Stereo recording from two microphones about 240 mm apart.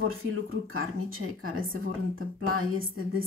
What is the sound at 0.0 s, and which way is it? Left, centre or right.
Speech, right.